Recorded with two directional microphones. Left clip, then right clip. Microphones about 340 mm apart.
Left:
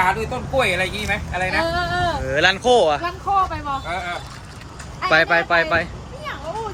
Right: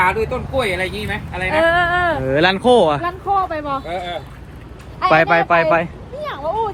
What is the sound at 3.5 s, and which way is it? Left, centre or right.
Speech, centre.